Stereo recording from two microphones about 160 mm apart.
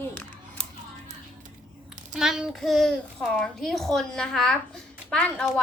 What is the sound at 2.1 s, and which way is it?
A child's voice, 5° right (ahead or behind).